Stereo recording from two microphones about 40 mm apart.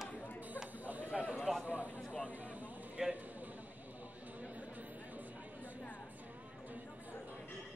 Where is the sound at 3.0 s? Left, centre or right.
Right.